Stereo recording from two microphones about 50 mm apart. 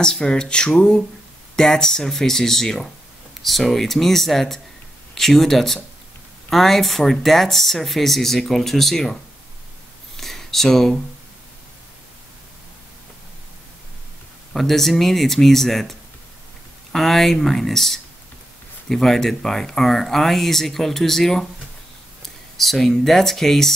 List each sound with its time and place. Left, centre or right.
0.0 s speech: centre
10.1 s a sound: centre
14.5 s speech: centre